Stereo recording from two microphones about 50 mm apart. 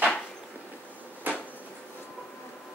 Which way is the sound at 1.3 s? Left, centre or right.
Right.